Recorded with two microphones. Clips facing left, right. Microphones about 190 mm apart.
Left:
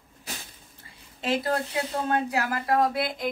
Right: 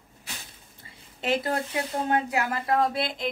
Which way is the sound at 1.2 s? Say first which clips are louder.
Even; 25° right (ahead or behind).